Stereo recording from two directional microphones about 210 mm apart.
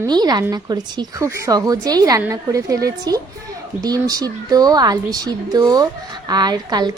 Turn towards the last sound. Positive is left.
turn(degrees=-20)  # may be behind; listen again after turning